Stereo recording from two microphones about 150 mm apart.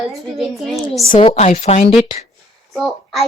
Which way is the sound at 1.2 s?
40° left (ahead or behind).